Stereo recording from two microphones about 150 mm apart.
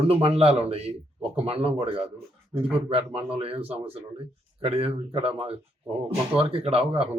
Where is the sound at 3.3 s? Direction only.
40° right (ahead or behind).